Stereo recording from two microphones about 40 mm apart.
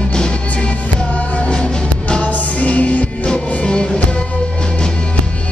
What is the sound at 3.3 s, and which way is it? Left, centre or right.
Music, left.